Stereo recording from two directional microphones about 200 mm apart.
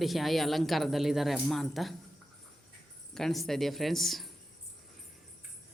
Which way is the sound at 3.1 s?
Centre (ahead or behind).